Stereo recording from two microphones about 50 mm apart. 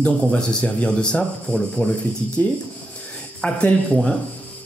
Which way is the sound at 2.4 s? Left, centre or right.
Left.